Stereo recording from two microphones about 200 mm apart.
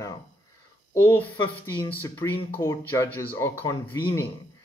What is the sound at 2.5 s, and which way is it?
Speech, 15° left (ahead or behind).